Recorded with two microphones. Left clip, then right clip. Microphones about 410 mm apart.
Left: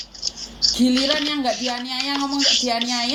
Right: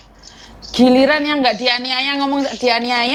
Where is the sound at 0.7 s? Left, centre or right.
Right.